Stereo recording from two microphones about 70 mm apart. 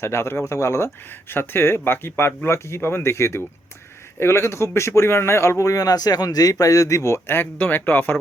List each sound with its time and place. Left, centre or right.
0.0 s speech: left
1.3 s speech: left